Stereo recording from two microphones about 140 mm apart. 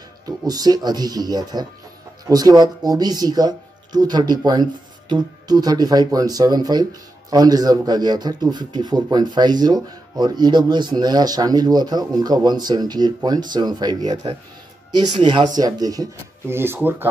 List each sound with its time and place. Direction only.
0.5 s speech: 30° right (ahead or behind)